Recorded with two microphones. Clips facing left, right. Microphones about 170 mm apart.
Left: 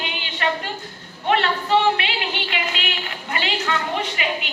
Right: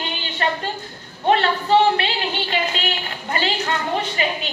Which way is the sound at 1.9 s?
35° right (ahead or behind).